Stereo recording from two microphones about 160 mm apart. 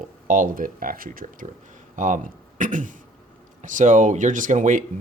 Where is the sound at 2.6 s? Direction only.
55° right (ahead or behind).